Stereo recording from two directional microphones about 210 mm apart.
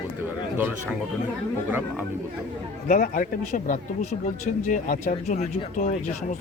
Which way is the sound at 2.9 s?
40° left (ahead or behind).